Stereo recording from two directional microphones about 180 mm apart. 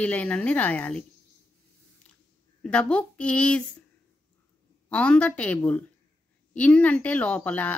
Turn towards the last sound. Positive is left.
turn(degrees=10)  # may be behind; listen again after turning